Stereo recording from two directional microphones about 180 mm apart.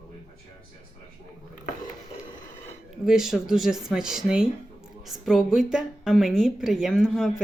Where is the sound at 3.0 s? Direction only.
Centre (ahead or behind).